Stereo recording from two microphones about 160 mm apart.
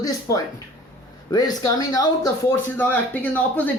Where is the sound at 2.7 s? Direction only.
10° left (ahead or behind).